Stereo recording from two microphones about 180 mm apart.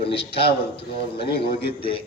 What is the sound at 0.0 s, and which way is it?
A man's voice, 30° left (ahead or behind).